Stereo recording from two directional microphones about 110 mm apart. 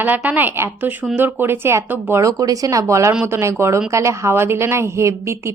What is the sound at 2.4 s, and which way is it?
Speech, 35° right (ahead or behind).